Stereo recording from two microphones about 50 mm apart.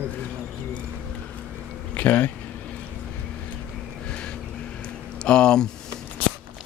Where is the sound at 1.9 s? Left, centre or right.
Left.